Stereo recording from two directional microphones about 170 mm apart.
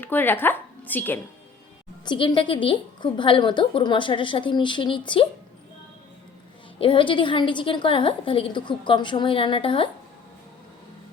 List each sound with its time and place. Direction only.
0.0 s speech: 10° left (ahead or behind)
2.0 s a woman's voice: 30° left (ahead or behind)
6.7 s a woman's voice: 30° left (ahead or behind)